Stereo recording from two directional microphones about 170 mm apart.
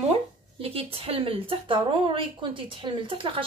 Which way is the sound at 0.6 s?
35° right (ahead or behind).